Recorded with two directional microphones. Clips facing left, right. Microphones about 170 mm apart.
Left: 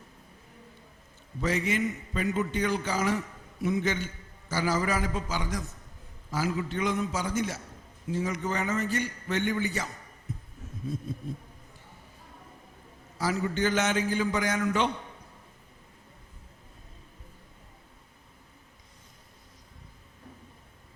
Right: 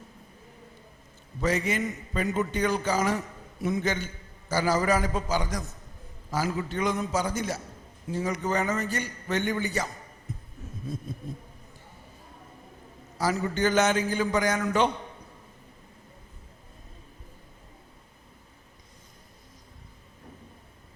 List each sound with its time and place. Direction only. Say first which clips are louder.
1.4 s a man's voice: right 1 dB; 40° right (ahead or behind)
13.1 s a man's voice: right 2 dB; 40° right (ahead or behind)